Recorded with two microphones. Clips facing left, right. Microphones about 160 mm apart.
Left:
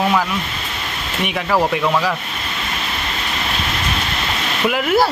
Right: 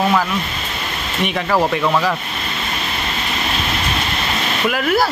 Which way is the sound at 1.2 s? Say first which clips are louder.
Right 1 dB; 10° left (ahead or behind).